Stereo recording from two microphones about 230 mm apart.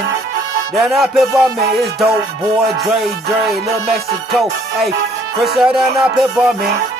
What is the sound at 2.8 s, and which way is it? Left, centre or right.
Music, centre.